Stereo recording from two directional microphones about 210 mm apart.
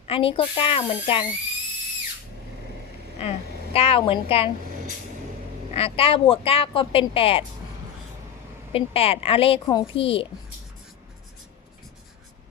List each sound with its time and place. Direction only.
0.1 s speech: 25° left (ahead or behind)
3.2 s a woman's voice: 30° left (ahead or behind)
5.7 s speech: 25° left (ahead or behind)
8.7 s speech: 30° left (ahead or behind)